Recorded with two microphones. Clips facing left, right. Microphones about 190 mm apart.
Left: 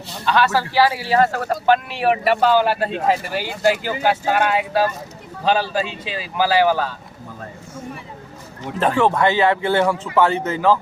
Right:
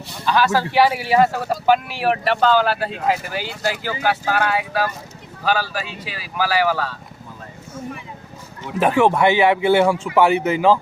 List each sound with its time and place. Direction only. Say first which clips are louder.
0.3 s speech: even; 15° right (ahead or behind); by 6.9 s 20° left (ahead or behind)
8.8 s speech: right 2 dB; 10° right (ahead or behind)